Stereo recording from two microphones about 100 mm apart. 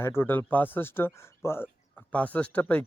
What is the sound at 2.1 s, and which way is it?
Speech, 15° left (ahead or behind).